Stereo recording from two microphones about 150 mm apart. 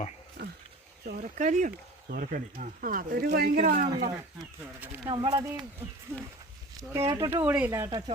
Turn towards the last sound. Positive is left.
turn(degrees=-15)  # may be behind; listen again after turning